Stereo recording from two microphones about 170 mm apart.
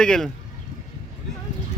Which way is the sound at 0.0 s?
5° left (ahead or behind).